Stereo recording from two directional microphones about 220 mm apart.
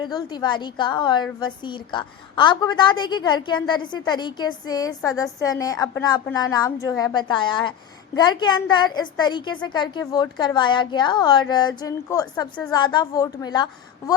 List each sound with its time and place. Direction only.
0.0 s a woman's voice: 20° left (ahead or behind)